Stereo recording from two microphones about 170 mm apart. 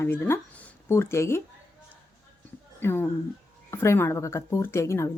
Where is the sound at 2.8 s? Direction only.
15° left (ahead or behind).